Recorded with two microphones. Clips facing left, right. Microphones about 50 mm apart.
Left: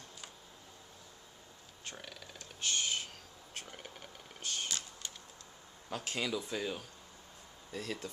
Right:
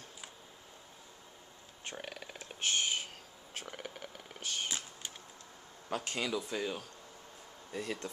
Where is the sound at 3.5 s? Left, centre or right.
Right.